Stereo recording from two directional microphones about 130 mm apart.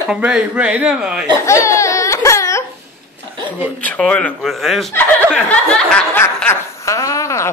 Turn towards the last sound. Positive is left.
turn(degrees=25)  # may be behind; listen again after turning